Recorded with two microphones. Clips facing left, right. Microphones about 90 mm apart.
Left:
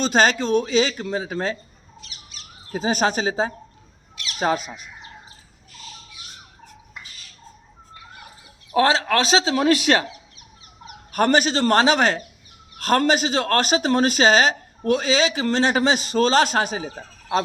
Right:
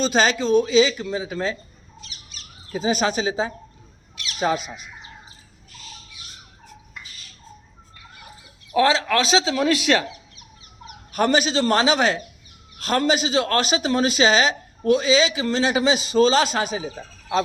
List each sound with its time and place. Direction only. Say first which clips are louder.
0.0 s speech: left 1 dB; 50° left (ahead or behind)
2.7 s speech: left 1 dB; 50° left (ahead or behind)
8.7 s speech: even; 40° left (ahead or behind)
11.1 s speech: left 1 dB; 50° left (ahead or behind)